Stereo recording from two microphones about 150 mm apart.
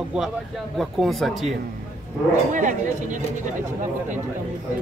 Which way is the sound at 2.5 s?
60° right (ahead or behind).